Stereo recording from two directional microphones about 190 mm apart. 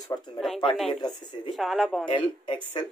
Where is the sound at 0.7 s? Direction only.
Centre (ahead or behind).